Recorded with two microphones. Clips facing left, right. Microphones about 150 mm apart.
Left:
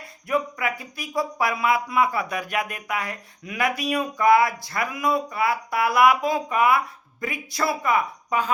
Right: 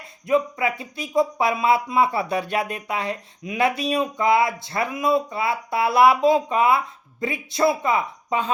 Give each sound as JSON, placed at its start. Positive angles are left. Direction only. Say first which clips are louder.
{"t": 0.3, "sound": "speech", "louder": "right 4 dB", "side_deg": -25}